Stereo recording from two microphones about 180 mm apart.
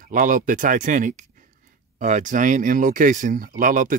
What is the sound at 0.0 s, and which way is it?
Speech, 45° right (ahead or behind).